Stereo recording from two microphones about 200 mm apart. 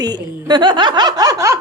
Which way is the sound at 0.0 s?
20° right (ahead or behind).